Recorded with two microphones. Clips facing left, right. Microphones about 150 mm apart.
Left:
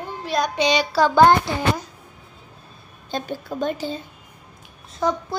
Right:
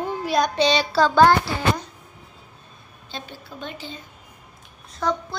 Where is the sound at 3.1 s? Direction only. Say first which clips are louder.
Left 9 dB; 45° left (ahead or behind).